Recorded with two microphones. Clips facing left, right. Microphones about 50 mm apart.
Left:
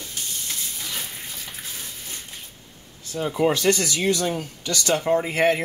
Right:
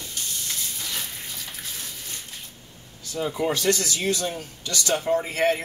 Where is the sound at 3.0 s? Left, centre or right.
Left.